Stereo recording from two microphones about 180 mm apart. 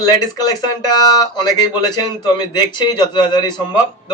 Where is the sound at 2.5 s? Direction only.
25° left (ahead or behind).